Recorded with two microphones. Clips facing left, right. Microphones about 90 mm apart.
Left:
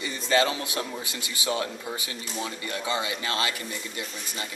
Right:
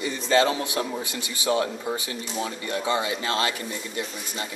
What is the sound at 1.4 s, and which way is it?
Speech, 10° right (ahead or behind).